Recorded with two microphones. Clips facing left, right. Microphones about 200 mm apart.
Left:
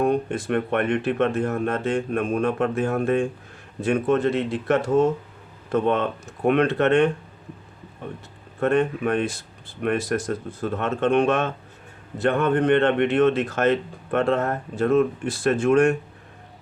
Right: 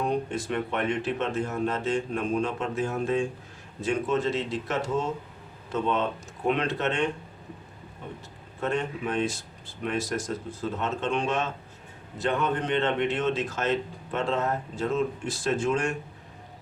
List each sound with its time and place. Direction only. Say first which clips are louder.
0.0 s speech: left 6 dB; 55° left (ahead or behind)
8.6 s speech: left 8 dB; 55° left (ahead or behind)